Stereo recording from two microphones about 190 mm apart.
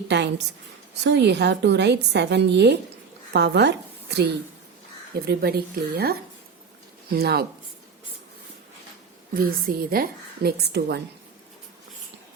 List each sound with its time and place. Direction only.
0.1 s a woman's voice: 65° right (ahead or behind)
7.1 s a woman's voice: 55° right (ahead or behind)
9.3 s a woman's voice: 50° right (ahead or behind)